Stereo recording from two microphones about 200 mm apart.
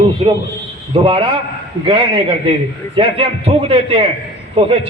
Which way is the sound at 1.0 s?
25° right (ahead or behind).